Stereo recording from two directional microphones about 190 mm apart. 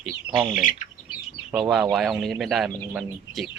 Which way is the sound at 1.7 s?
Centre (ahead or behind).